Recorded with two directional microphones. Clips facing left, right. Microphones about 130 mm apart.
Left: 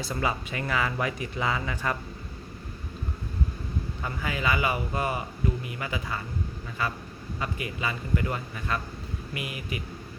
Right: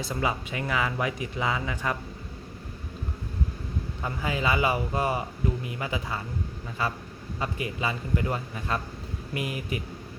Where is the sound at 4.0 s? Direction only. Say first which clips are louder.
Right 3 dB; 25° right (ahead or behind).